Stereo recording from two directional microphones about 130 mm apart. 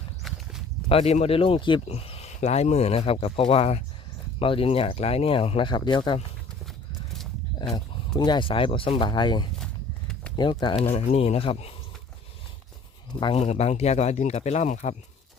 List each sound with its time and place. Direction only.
0.2 s walk: centre (ahead or behind)
0.9 s speech: 50° left (ahead or behind)
3.5 s speech: 55° left (ahead or behind)
4.4 s speech: 45° left (ahead or behind)
7.7 s speech: 30° left (ahead or behind)
10.9 s speech: 55° left (ahead or behind)
13.3 s speech: 55° left (ahead or behind)